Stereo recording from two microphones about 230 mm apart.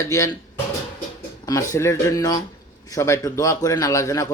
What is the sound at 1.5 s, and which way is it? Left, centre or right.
A man's voice, centre.